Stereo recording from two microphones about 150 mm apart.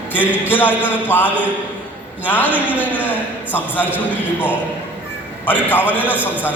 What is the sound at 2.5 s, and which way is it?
Speech, 10° right (ahead or behind).